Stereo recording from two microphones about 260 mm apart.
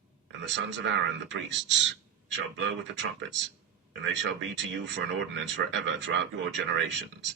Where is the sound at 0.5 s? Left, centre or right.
Right.